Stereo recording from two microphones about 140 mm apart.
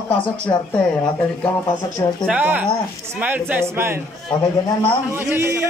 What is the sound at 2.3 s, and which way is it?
Speech, 10° right (ahead or behind).